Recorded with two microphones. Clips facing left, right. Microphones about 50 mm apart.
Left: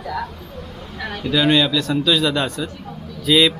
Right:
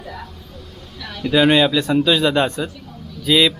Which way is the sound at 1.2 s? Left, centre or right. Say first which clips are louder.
Right 3 dB; right.